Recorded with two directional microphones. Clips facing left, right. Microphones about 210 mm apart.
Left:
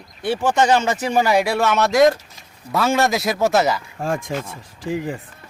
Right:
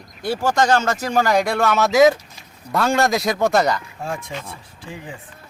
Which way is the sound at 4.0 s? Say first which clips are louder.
Left 5 dB; 50° left (ahead or behind).